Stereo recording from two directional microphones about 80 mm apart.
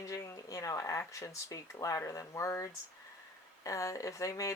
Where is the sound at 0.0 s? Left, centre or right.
Left.